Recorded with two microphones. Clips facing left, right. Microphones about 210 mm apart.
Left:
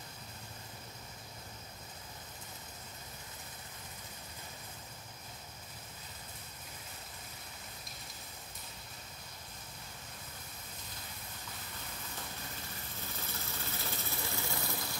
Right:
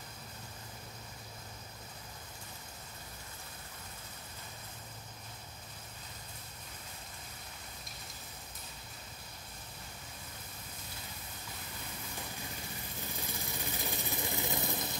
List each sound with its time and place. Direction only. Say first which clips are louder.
13.3 s vehicle: right 2 dB; 15° right (ahead or behind)